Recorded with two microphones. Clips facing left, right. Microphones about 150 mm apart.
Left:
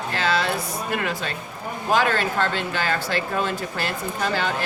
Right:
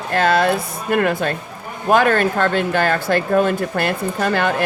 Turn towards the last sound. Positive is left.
turn(degrees=-55)  # may be behind; listen again after turning